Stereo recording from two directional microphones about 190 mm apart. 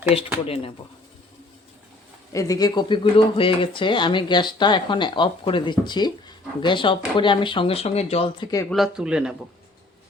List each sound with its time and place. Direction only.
0.1 s speech: 30° left (ahead or behind)
2.3 s speech: 15° left (ahead or behind)
8.7 s speech: centre (ahead or behind)